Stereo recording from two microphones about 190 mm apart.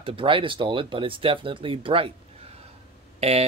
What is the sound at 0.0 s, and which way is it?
Speech, 30° right (ahead or behind).